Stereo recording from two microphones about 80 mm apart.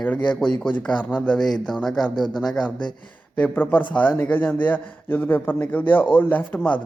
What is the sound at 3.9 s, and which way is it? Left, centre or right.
A man's voice, centre.